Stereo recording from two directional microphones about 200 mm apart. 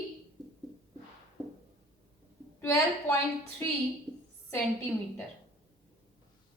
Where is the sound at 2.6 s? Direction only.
10° left (ahead or behind).